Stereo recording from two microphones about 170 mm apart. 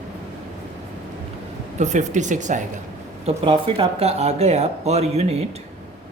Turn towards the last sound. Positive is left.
turn(degrees=-40)  # may be behind; listen again after turning